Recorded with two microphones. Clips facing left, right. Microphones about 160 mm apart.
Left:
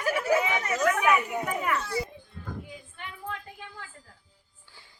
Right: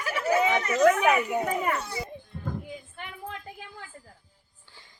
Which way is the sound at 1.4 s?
45° right (ahead or behind).